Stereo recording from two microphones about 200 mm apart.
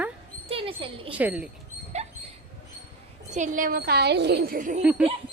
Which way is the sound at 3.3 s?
40° right (ahead or behind).